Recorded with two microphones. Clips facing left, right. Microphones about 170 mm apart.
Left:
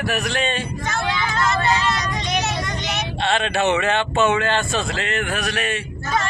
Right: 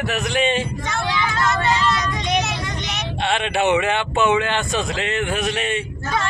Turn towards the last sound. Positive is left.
turn(degrees=-25)  # may be behind; listen again after turning